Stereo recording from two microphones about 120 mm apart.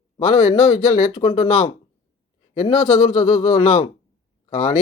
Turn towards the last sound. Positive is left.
turn(degrees=50)  # may be behind; listen again after turning